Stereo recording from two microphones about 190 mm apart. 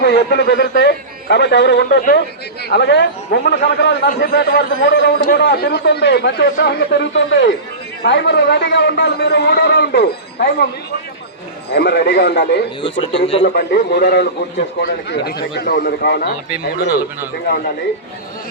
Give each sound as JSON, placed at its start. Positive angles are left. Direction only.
{"t": 0.0, "sound": "a man's voice", "side_deg": 60}
{"t": 11.7, "sound": "a man's voice", "side_deg": 60}
{"t": 12.8, "sound": "a man's voice", "side_deg": 25}
{"t": 13.4, "sound": "a man's voice", "side_deg": 55}